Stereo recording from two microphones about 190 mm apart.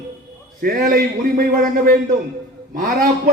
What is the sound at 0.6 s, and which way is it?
A man's voice, 45° right (ahead or behind).